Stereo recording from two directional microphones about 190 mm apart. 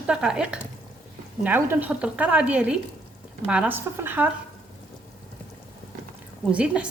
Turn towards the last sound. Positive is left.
turn(degrees=-5)  # may be behind; listen again after turning